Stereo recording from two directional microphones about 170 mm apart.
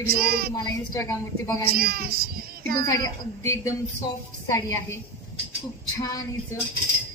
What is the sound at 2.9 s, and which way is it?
A woman's voice, 20° left (ahead or behind).